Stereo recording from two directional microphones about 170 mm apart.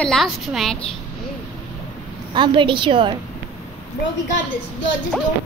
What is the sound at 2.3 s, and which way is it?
Speech, 25° right (ahead or behind).